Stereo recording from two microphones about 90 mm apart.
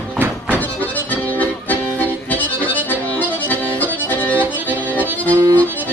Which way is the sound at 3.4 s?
20° left (ahead or behind).